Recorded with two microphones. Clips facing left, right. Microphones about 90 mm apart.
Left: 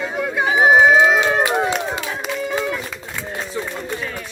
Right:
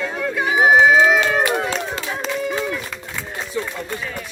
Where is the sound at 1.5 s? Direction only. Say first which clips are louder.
Left 2 dB; 10° left (ahead or behind).